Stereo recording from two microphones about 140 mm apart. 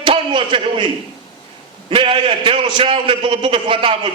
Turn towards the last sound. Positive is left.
turn(degrees=-40)  # may be behind; listen again after turning